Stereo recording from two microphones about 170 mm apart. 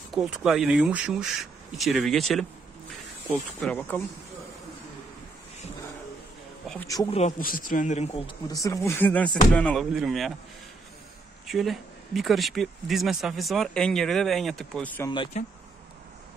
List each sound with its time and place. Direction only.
0.1 s speech: 5° right (ahead or behind)
3.5 s speech: 10° left (ahead or behind)
7.1 s speech: 40° left (ahead or behind)
8.5 s speech: 20° left (ahead or behind); by 10.3 s centre (ahead or behind)
11.4 s speech: centre (ahead or behind)
15.3 s speech: 45° left (ahead or behind)